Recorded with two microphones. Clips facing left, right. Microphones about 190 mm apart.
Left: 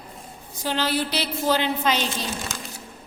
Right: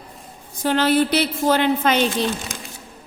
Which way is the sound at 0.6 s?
55° right (ahead or behind).